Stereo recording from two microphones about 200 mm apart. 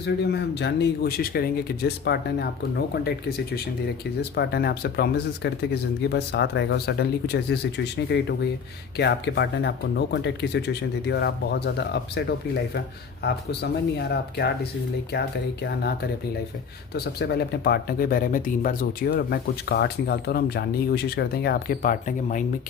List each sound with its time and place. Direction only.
0.0 s speech: 55° left (ahead or behind)
4.2 s speech: 55° left (ahead or behind)
13.2 s speech: 55° left (ahead or behind)
16.9 s speech: 55° left (ahead or behind)